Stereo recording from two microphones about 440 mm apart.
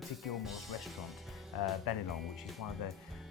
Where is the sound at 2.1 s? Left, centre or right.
Centre.